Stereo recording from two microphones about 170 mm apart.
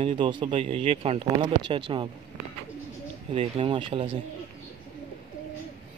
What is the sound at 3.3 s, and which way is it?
Speech, 30° right (ahead or behind).